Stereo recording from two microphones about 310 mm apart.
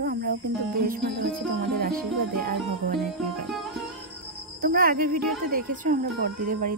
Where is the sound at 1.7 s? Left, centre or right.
Right.